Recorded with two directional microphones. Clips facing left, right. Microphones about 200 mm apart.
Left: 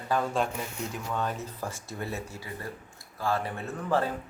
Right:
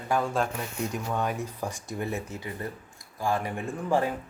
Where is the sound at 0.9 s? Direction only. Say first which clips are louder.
Right 2 dB; 15° right (ahead or behind).